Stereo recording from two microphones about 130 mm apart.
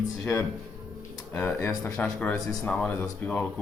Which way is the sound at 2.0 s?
10° left (ahead or behind).